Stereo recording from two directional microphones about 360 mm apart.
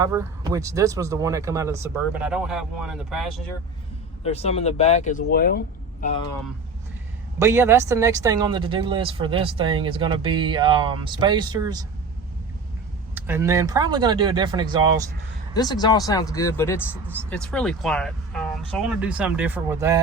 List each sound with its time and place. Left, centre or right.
0.0 s speech: centre
4.2 s speech: centre
7.3 s speech: centre
13.1 s speech: centre
15.5 s speech: centre